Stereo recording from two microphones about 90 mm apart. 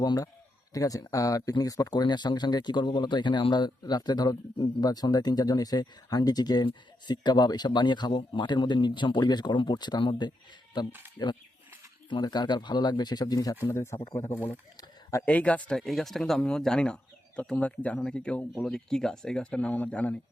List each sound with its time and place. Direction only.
0.0 s speech: 50° left (ahead or behind)
11.2 s speech: 40° left (ahead or behind)
12.2 s speech: 50° left (ahead or behind)
13.7 s speech: 30° left (ahead or behind)
15.2 s speech: 15° left (ahead or behind)